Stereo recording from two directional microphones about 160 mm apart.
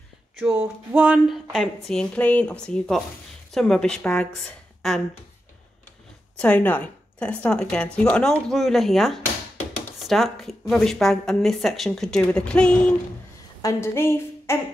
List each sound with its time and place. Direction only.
0.6 s speech: 10° right (ahead or behind)
6.3 s speech: 10° left (ahead or behind)
13.6 s a woman's voice: 20° left (ahead or behind)